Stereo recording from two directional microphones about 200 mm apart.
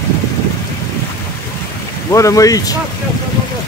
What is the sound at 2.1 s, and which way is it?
Speech, 15° left (ahead or behind).